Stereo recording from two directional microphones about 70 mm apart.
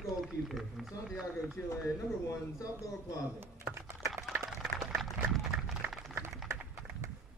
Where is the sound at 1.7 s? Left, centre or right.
Left.